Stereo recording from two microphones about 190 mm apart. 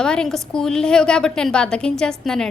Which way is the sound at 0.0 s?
5° left (ahead or behind).